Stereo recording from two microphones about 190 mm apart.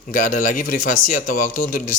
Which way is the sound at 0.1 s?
45° left (ahead or behind).